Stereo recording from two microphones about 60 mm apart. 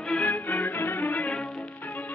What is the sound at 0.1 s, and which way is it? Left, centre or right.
Music, left.